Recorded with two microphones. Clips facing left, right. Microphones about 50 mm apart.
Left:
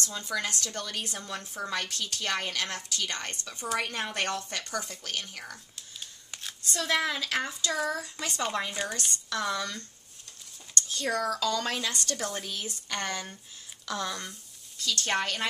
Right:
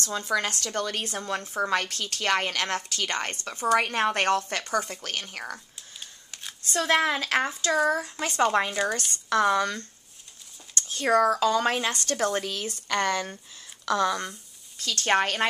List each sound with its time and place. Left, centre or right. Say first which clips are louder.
0.1 s a woman's voice: right 10 dB; right
6.7 s a woman's voice: right 5 dB; right
10.8 s speech: right 8 dB; right
12.2 s a woman's voice: right 8 dB; right
14.8 s speech: right 5 dB; right